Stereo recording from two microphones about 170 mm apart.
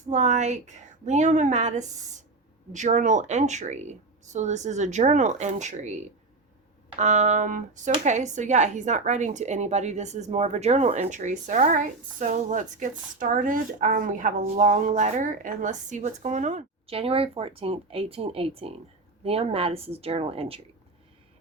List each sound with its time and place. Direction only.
0.0 s speech: 45° right (ahead or behind)